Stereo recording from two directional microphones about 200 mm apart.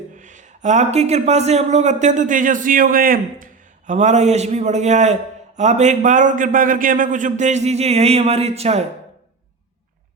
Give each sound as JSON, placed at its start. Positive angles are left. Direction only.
{"t": 0.2, "sound": "a man's voice", "side_deg": -40}